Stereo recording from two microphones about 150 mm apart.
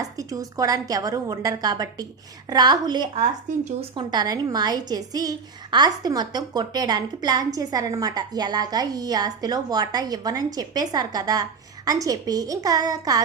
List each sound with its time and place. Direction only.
0.0 s a woman's voice: 25° right (ahead or behind)
3.2 s speech: 50° right (ahead or behind)
3.9 s a woman's voice: 30° right (ahead or behind)